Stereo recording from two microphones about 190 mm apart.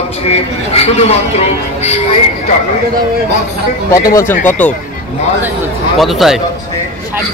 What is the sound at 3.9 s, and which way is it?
Speech, 15° left (ahead or behind).